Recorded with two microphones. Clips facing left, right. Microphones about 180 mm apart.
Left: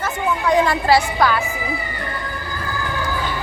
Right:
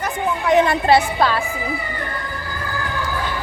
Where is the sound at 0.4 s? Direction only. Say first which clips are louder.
Right 2 dB; 20° right (ahead or behind).